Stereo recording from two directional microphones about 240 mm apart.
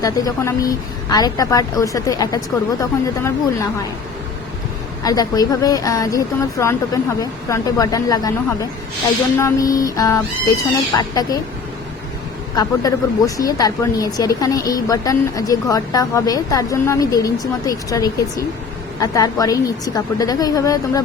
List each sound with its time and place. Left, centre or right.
0.0 s speech: centre
5.0 s speech: centre
9.4 s speech: centre
12.5 s speech: centre